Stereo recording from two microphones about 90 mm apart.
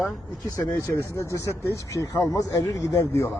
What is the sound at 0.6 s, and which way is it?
A man's voice, 30° left (ahead or behind).